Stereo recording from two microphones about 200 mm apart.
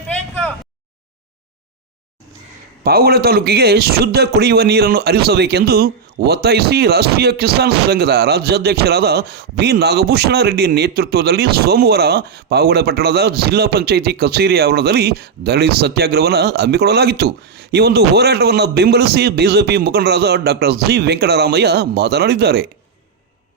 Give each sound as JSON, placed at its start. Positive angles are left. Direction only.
{"t": 2.8, "sound": "a man's voice", "side_deg": -50}